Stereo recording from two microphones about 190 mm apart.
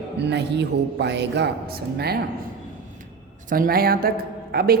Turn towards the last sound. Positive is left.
turn(degrees=-55)  # may be behind; listen again after turning